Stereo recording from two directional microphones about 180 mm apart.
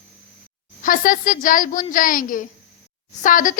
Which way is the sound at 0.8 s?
50° left (ahead or behind).